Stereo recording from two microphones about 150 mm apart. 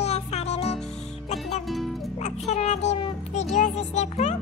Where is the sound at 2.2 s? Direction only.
50° left (ahead or behind).